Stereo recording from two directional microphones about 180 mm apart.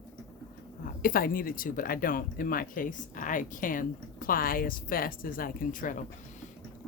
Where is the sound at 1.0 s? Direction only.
55° left (ahead or behind).